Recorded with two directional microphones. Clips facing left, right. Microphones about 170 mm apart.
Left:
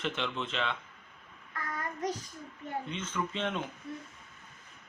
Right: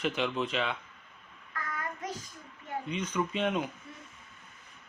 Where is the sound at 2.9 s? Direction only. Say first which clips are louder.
Right 7 dB; 15° right (ahead or behind).